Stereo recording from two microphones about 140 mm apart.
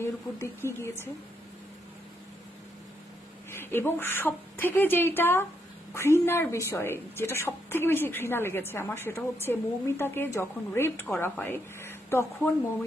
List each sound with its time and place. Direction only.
0.0 s a woman's voice: 20° left (ahead or behind)
3.5 s a woman's voice: 15° left (ahead or behind)